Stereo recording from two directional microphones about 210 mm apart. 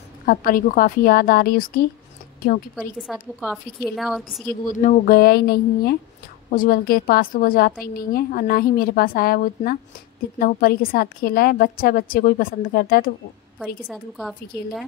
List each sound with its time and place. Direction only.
0.3 s a woman's voice: 40° left (ahead or behind)
2.7 s a woman's voice: centre (ahead or behind)
4.6 s a woman's voice: 40° left (ahead or behind)
13.8 s a woman's voice: centre (ahead or behind)